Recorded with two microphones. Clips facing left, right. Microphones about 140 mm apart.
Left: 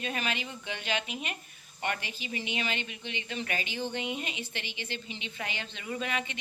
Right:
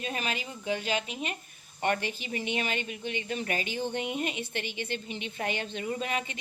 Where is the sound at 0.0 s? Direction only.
35° right (ahead or behind).